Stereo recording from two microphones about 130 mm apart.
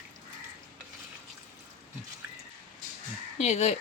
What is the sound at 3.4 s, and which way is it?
Speech, 55° left (ahead or behind).